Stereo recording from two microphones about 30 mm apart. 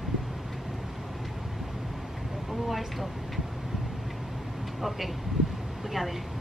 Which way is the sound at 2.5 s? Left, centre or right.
Centre.